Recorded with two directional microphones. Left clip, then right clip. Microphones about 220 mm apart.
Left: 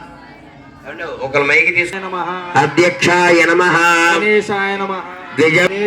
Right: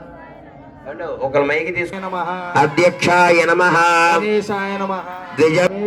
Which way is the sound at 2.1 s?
35° left (ahead or behind).